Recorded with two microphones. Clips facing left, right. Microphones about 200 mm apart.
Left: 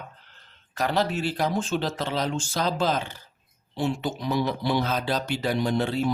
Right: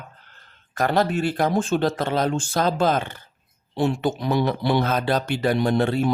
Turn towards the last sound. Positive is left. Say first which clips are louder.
# right 4 dB
turn(degrees=-55)  # may be behind; listen again after turning